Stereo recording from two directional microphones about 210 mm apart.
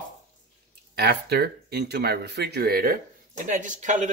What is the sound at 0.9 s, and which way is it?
Speech, 50° right (ahead or behind).